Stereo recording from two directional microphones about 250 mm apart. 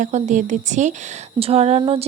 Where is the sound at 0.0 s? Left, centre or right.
Right.